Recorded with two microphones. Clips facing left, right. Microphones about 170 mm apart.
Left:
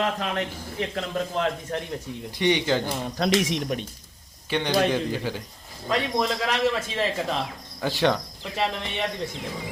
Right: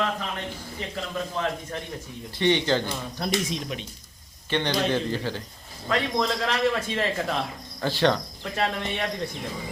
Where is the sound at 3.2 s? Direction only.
90° left.